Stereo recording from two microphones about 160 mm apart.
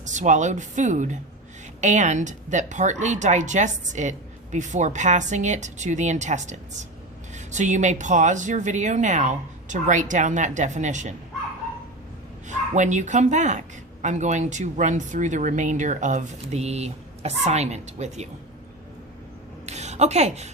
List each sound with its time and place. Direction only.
0.0 s speech: 50° right (ahead or behind)
12.5 s speech: 50° right (ahead or behind)
19.6 s a sound: 45° right (ahead or behind)